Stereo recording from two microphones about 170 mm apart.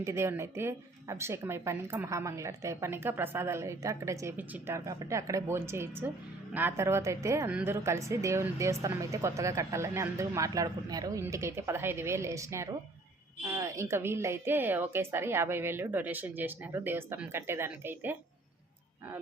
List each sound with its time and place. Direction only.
0.0 s speech: 15° right (ahead or behind)